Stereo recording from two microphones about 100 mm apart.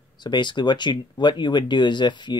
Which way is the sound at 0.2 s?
50° left (ahead or behind).